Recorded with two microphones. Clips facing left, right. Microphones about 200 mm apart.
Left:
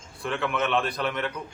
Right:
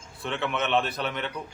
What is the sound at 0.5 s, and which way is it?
Speech, 25° right (ahead or behind).